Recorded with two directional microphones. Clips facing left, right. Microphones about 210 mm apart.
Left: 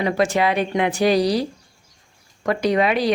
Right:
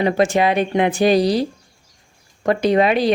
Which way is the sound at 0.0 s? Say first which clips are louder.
Right 3 dB; 25° right (ahead or behind).